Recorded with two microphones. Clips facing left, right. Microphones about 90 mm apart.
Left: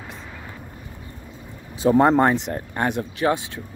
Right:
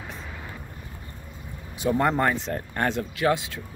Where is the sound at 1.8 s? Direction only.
30° left (ahead or behind).